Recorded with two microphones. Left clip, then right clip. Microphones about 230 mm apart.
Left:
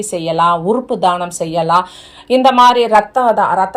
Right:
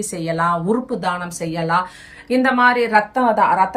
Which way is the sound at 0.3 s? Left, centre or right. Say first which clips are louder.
Left 6 dB; right.